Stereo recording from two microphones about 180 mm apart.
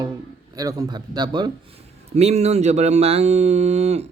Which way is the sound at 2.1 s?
35° right (ahead or behind).